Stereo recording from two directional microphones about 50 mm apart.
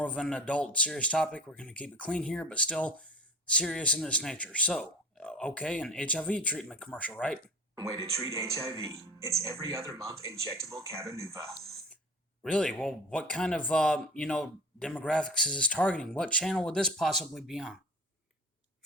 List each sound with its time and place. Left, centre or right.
0.0 s speech: left
6.9 s speech: left
8.1 s speech: right
12.5 s speech: left
17.0 s speech: centre